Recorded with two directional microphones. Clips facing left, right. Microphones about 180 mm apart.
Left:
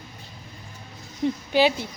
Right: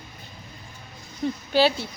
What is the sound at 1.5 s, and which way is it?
Speech, 15° left (ahead or behind).